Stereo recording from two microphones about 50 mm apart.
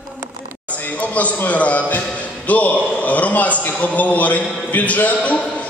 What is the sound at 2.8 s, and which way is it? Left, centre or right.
A man's voice, left.